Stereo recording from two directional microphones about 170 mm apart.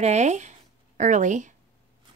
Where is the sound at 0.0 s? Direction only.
40° right (ahead or behind).